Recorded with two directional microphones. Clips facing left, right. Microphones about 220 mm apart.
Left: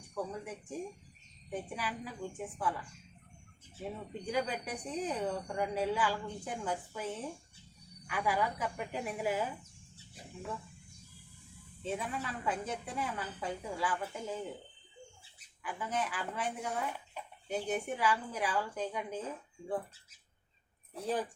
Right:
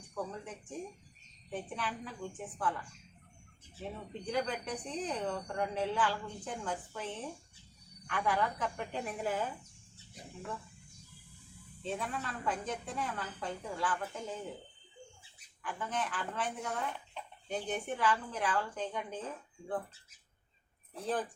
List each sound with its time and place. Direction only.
0.1 s speech: 10° left (ahead or behind)
4.3 s speech: 10° left (ahead or behind)
11.8 s speech: 10° left (ahead or behind)
15.6 s speech: 10° left (ahead or behind)
20.9 s speech: 10° left (ahead or behind)